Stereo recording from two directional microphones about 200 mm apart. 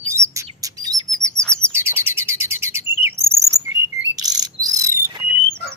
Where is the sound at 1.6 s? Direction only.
10° right (ahead or behind).